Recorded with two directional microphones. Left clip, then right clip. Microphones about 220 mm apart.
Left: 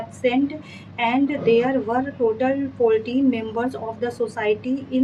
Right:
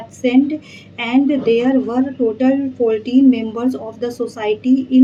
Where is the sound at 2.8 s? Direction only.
30° right (ahead or behind).